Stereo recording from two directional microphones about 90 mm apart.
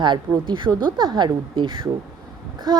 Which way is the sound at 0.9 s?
55° right (ahead or behind).